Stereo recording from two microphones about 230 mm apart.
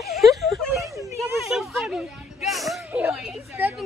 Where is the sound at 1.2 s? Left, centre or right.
Centre.